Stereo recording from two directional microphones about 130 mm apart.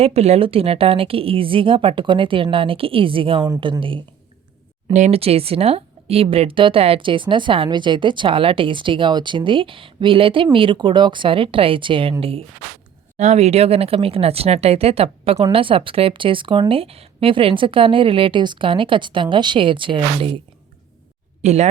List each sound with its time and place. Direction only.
0.0 s a woman's voice: 55° right (ahead or behind)
4.9 s a woman's voice: 55° right (ahead or behind)
13.1 s a woman's voice: 60° right (ahead or behind); by 20.4 s 40° right (ahead or behind)
21.4 s speech: 60° right (ahead or behind)